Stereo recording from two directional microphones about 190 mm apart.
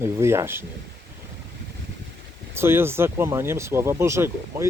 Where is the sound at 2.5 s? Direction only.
10° right (ahead or behind).